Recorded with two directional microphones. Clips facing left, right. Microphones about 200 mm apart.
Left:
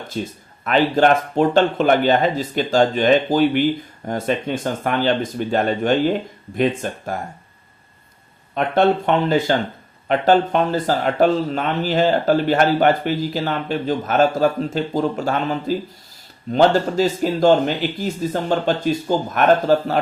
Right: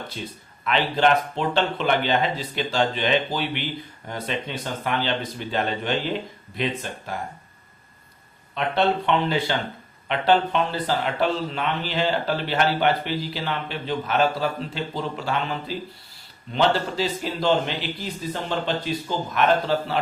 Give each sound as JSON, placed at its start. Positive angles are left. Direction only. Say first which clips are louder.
{"t": 0.1, "sound": "speech", "louder": "left 8 dB", "side_deg": 45}
{"t": 8.5, "sound": "speech", "louder": "left 6 dB", "side_deg": 50}